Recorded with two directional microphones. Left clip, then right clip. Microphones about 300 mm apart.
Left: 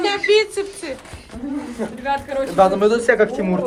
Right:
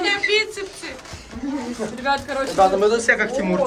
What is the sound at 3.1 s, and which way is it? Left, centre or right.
Speech, centre.